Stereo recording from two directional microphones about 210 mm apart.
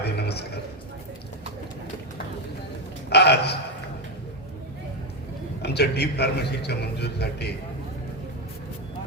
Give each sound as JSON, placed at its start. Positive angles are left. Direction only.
{"t": 0.0, "sound": "a sound", "side_deg": 50}
{"t": 3.1, "sound": "a man's voice", "side_deg": 50}
{"t": 5.6, "sound": "a man's voice", "side_deg": 50}